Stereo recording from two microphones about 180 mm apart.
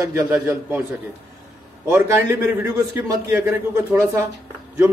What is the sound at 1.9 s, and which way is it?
A man's voice, 15° right (ahead or behind).